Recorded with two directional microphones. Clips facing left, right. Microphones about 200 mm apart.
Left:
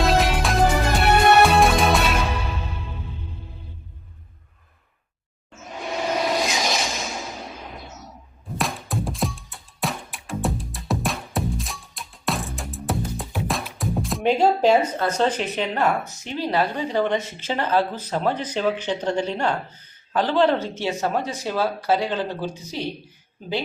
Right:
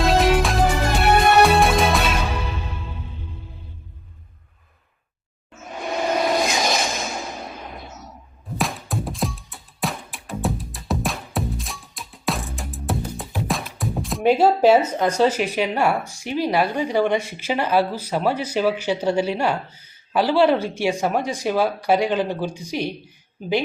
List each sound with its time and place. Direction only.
0.0 s music: centre (ahead or behind)
5.8 s a sound: 50° right (ahead or behind)
8.5 s music: centre (ahead or behind)